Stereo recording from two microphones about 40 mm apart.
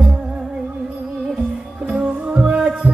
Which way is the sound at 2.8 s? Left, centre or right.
Right.